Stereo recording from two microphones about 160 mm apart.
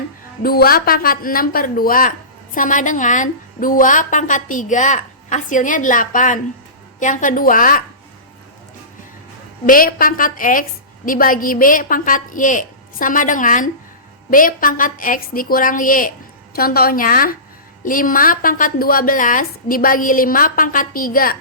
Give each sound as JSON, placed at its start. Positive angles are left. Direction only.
{"t": 0.4, "sound": "a woman's voice", "side_deg": 70}
{"t": 9.6, "sound": "a woman's voice", "side_deg": 65}
{"t": 16.6, "sound": "a woman's voice", "side_deg": 70}